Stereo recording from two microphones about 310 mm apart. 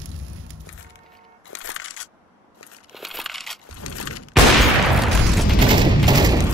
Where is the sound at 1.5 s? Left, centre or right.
Left.